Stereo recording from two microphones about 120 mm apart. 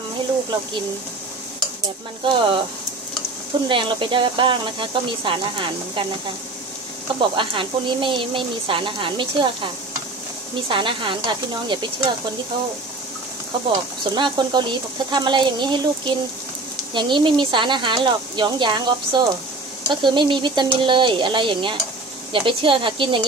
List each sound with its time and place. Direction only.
2.2 s speech: 45° right (ahead or behind)
3.6 s speech: 45° right (ahead or behind)
7.2 s speech: 45° right (ahead or behind)
10.7 s speech: 45° right (ahead or behind)
13.7 s speech: 40° right (ahead or behind)